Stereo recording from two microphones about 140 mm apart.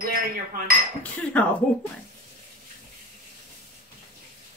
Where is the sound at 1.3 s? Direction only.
10° left (ahead or behind).